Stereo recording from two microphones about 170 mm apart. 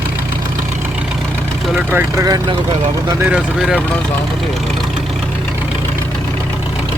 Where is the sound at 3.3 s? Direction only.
Centre (ahead or behind).